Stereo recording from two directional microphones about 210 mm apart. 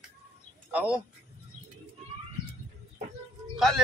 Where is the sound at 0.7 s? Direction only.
5° right (ahead or behind).